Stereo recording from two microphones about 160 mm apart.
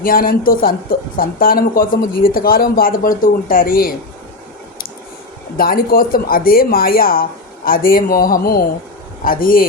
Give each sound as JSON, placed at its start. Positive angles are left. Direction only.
{"t": 0.0, "sound": "speech", "side_deg": 65}
{"t": 5.5, "sound": "speech", "side_deg": 65}